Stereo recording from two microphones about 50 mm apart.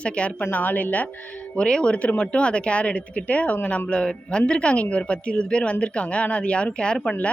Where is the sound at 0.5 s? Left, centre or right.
Left.